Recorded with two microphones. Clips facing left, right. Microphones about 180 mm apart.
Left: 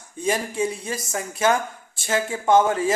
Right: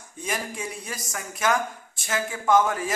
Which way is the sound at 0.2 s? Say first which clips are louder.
Left 8 dB; 30° left (ahead or behind).